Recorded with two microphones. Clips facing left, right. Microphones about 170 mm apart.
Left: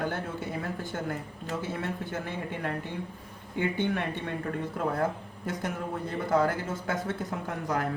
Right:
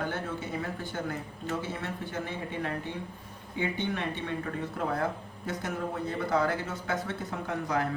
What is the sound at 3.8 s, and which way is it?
Speech, 50° left (ahead or behind).